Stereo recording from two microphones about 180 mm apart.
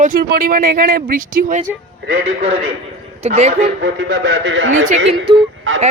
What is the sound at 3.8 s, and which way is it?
A man's voice, 80° right.